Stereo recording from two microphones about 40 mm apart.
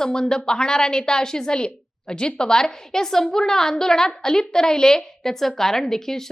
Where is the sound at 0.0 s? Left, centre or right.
Centre.